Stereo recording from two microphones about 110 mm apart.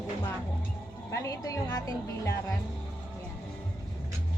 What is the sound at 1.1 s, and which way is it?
Speech, 30° left (ahead or behind).